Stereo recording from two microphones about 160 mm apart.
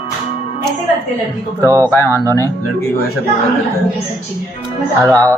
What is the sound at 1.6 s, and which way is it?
Speech, 20° right (ahead or behind).